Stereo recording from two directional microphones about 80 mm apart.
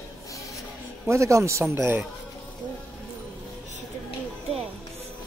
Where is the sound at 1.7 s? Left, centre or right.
Right.